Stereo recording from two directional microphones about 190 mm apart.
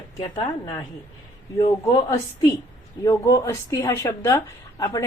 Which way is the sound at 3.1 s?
15° left (ahead or behind).